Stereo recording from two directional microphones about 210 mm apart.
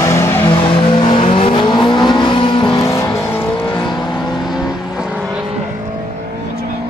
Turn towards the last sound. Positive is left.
turn(degrees=-5)  # may be behind; listen again after turning